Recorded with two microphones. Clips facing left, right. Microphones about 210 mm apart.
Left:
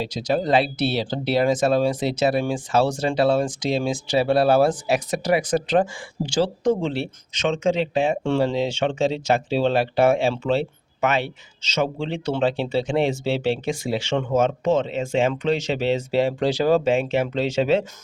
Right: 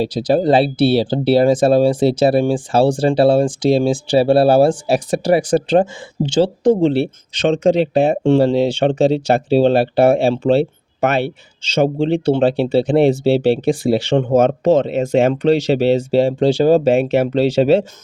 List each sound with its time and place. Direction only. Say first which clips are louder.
0.0 s speech: right 8 dB; 35° right (ahead or behind)
11.7 s speech: right 9 dB; 35° right (ahead or behind)